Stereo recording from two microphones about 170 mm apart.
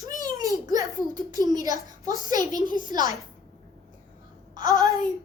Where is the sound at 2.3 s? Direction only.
50° left (ahead or behind).